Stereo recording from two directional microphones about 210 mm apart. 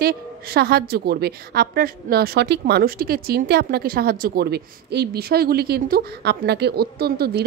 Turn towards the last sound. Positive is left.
turn(degrees=-50)  # may be behind; listen again after turning